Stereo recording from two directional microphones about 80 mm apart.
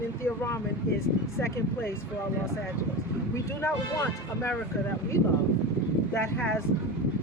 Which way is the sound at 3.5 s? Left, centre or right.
Left.